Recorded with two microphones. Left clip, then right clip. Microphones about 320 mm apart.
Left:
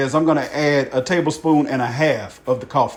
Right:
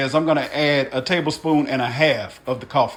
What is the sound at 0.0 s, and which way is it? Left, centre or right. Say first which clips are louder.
Speech: left 1 dB; centre.